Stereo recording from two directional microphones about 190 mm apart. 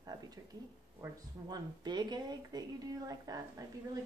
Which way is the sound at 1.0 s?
20° right (ahead or behind).